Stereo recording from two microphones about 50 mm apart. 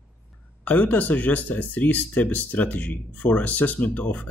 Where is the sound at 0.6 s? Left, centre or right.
Left.